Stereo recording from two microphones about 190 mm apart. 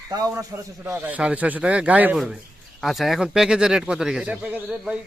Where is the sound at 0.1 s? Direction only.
20° right (ahead or behind).